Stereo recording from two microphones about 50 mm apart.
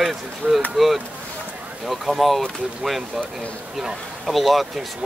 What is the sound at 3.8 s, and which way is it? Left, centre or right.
Speech, centre.